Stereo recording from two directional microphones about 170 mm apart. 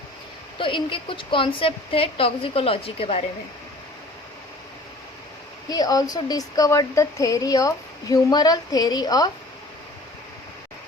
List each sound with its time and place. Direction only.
0.6 s a woman's voice: 30° left (ahead or behind)
5.6 s speech: 20° left (ahead or behind)